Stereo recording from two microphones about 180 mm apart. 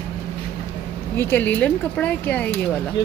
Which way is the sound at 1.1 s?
10° left (ahead or behind).